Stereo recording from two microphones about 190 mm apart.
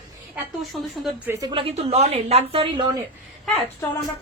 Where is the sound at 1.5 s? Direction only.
30° right (ahead or behind).